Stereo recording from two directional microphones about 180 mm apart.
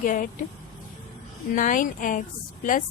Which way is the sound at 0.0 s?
45° left (ahead or behind).